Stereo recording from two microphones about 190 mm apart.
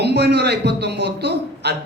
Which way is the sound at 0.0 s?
60° right (ahead or behind).